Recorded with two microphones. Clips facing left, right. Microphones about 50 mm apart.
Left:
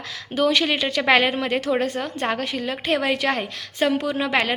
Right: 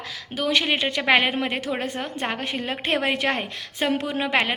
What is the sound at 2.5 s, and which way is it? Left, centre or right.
Speech, right.